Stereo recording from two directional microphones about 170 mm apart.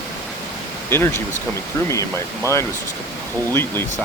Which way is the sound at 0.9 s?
15° left (ahead or behind).